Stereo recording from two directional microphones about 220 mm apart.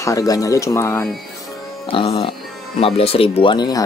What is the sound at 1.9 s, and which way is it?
Speech, 25° left (ahead or behind).